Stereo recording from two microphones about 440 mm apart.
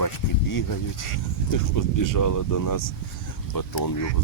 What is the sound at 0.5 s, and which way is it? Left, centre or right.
Speech, left.